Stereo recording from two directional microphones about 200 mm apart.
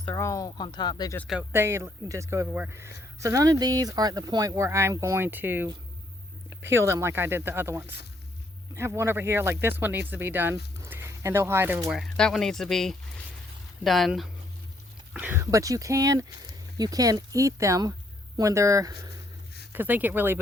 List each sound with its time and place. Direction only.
0.0 s speech: 15° left (ahead or behind)
1.2 s speech: centre (ahead or behind)
1.5 s speech: 15° right (ahead or behind)
6.6 s speech: 70° right (ahead or behind)
6.8 s speech: 15° right (ahead or behind)